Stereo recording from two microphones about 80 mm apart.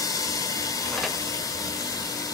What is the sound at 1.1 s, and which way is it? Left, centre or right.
Steam, left.